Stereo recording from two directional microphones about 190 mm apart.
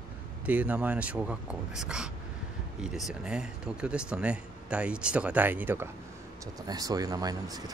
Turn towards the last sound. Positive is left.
turn(degrees=-20)  # may be behind; listen again after turning